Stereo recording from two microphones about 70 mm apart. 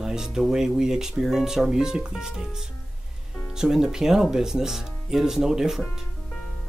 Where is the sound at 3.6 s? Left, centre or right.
Centre.